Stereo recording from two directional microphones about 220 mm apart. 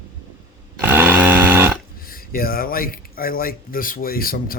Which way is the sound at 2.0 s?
40° left (ahead or behind).